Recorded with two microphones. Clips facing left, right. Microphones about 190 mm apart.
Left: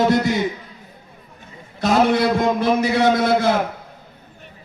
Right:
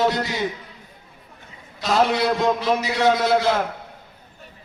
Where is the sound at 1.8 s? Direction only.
50° left (ahead or behind).